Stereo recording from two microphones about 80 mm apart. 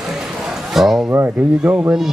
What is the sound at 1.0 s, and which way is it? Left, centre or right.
Speech, right.